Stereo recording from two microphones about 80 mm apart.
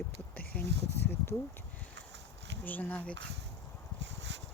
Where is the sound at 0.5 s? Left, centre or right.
Centre.